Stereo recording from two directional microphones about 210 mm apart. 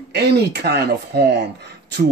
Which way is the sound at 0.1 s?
50° right (ahead or behind).